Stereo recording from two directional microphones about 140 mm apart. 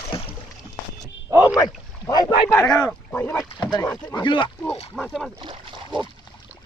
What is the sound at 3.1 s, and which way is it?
Speech, 15° left (ahead or behind).